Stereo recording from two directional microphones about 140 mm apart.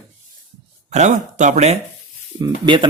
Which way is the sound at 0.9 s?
60° right (ahead or behind).